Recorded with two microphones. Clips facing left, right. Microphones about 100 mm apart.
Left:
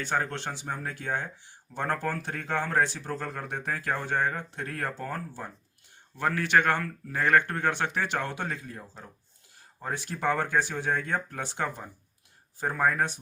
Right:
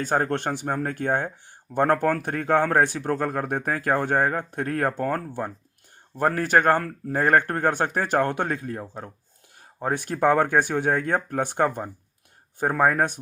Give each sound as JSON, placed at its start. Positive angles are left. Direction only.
{"t": 0.0, "sound": "speech", "side_deg": -45}
{"t": 6.1, "sound": "speech", "side_deg": -40}